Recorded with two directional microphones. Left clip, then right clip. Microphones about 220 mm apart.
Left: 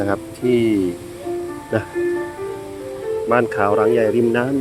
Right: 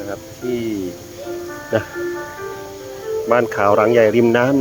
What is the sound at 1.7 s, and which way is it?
Speech, centre (ahead or behind).